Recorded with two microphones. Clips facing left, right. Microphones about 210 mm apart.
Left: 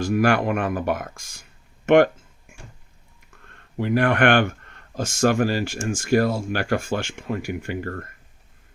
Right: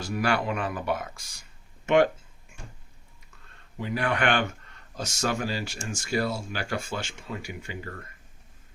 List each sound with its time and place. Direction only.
0.0 s speech: 50° left (ahead or behind)
3.8 s speech: 60° left (ahead or behind)